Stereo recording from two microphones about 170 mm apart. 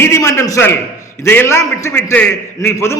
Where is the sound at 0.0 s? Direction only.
15° left (ahead or behind).